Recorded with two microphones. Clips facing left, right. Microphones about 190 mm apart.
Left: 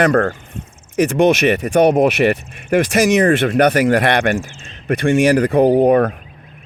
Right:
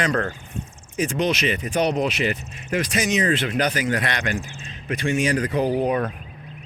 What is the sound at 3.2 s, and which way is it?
Speech, 50° left (ahead or behind).